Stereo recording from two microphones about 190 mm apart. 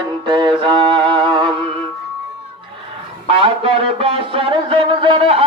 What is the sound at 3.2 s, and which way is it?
Mantra, 30° right (ahead or behind).